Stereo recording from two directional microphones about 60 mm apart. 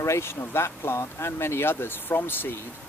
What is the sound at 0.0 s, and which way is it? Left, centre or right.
Speech, left.